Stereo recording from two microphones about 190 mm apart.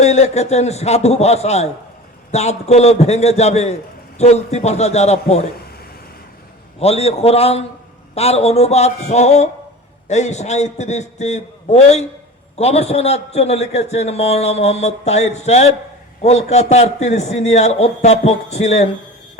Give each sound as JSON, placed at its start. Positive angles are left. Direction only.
{"t": 0.0, "sound": "a man's voice", "side_deg": 35}
{"t": 6.7, "sound": "a man's voice", "side_deg": 30}